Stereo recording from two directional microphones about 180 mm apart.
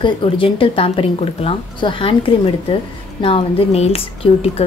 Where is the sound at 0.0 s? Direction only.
30° left (ahead or behind).